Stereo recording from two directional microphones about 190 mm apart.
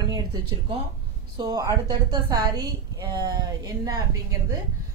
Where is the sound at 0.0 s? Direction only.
25° right (ahead or behind).